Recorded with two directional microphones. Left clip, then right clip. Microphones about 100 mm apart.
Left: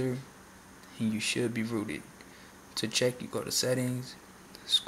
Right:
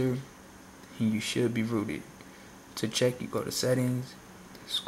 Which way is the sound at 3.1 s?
5° left (ahead or behind).